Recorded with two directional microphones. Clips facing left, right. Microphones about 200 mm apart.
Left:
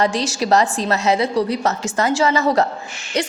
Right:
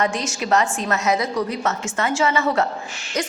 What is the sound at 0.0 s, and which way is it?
A woman's voice, 35° left (ahead or behind).